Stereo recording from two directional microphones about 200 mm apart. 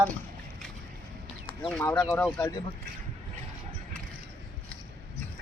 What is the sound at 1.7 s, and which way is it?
Speech, 10° left (ahead or behind).